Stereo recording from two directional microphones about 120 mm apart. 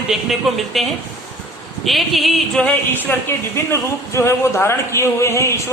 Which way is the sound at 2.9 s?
15° left (ahead or behind).